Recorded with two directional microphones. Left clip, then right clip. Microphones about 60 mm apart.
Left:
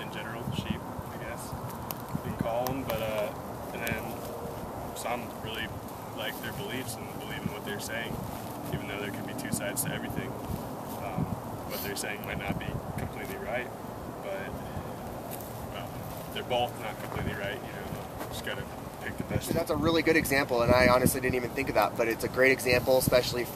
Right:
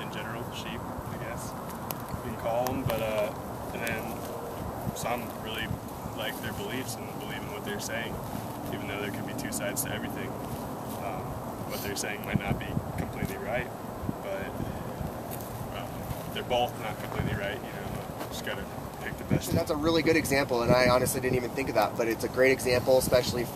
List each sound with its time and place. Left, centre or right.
2.7 s speech: centre
5.0 s speech: centre
8.9 s speech: centre
12.0 s speech: centre
16.3 s speech: centre
19.3 s speech: left